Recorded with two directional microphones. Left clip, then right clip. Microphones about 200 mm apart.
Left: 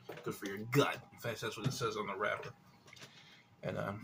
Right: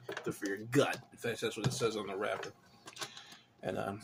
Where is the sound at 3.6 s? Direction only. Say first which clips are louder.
Right 2 dB; 15° right (ahead or behind).